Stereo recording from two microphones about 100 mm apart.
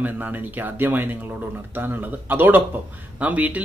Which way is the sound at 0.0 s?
20° right (ahead or behind).